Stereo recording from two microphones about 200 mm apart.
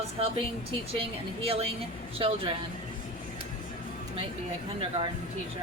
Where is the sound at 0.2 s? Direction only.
30° right (ahead or behind).